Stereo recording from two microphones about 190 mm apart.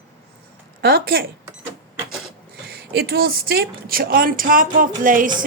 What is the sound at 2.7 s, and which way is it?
A woman's voice, 55° right (ahead or behind).